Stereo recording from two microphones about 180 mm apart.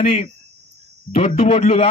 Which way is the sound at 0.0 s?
35° left (ahead or behind).